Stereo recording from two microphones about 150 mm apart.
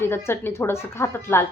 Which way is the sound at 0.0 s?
15° left (ahead or behind).